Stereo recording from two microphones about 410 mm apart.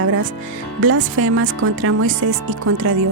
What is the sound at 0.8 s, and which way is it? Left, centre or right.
Speech, right.